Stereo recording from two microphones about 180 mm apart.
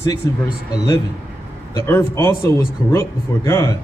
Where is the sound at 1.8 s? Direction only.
15° left (ahead or behind).